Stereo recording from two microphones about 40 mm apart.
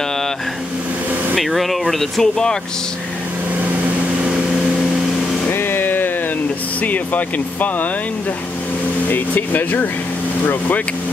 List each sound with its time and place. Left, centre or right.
1.3 s speech: centre
5.5 s music: left
6.8 s speech: left
9.1 s speech: left